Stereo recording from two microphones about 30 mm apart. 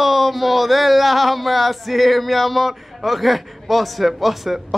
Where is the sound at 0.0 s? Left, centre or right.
Centre.